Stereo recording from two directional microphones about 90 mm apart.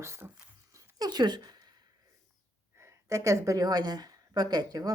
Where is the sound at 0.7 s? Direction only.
45° right (ahead or behind).